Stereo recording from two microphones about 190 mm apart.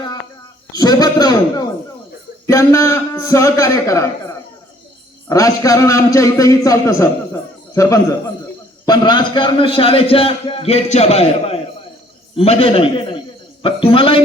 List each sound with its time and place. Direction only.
0.8 s a man's voice: 20° left (ahead or behind)
5.3 s a man's voice: 15° left (ahead or behind)